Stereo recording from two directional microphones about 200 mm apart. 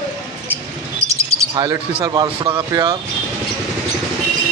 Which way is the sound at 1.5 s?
20° right (ahead or behind).